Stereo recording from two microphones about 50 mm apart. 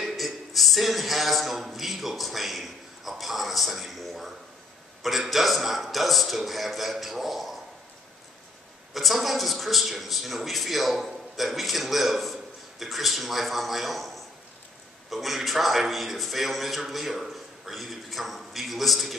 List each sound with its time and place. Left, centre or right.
0.0 s a man's voice: centre
8.9 s a man's voice: centre